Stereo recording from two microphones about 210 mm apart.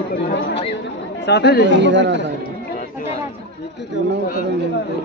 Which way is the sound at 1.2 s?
55° left (ahead or behind).